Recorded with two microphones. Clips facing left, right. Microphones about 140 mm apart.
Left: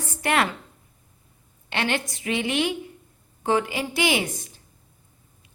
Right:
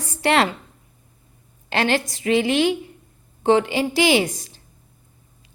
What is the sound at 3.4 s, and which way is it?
Speech, 25° right (ahead or behind).